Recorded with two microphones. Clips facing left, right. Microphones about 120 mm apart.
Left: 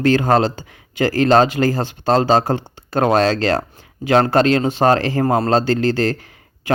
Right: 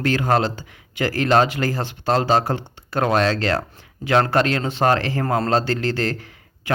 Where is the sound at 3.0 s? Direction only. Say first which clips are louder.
Left 4 dB; 30° left (ahead or behind).